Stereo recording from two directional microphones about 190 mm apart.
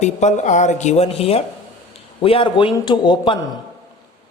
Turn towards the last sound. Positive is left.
turn(degrees=25)  # may be behind; listen again after turning